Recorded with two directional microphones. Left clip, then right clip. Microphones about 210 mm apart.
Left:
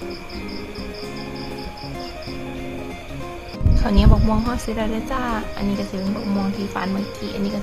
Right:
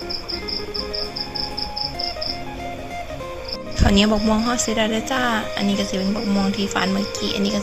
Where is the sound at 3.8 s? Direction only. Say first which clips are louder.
Right 4 dB; 10° right (ahead or behind).